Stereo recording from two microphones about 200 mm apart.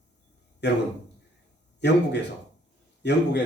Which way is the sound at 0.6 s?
60° left (ahead or behind).